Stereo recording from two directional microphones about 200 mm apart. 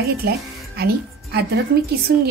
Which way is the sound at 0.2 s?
50° right (ahead or behind).